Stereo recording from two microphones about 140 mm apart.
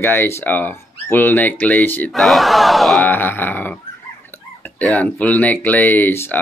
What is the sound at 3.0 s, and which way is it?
Speech, 15° left (ahead or behind).